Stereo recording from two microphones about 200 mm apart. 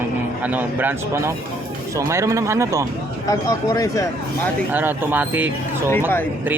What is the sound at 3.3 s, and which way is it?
Speech, 15° left (ahead or behind).